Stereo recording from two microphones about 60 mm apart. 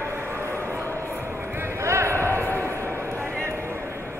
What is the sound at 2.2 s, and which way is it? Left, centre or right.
Basketball bounce, left.